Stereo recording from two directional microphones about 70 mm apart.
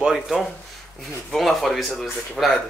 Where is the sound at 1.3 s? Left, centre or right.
Centre.